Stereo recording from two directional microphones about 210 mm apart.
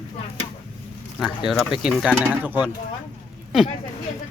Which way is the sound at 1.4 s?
Centre (ahead or behind).